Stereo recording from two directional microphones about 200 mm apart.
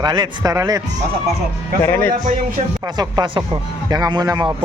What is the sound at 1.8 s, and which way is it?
Speech, 10° left (ahead or behind).